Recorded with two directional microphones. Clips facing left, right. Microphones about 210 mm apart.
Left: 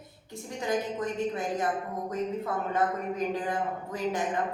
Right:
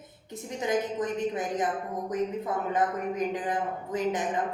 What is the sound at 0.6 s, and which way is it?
Speech, 20° right (ahead or behind).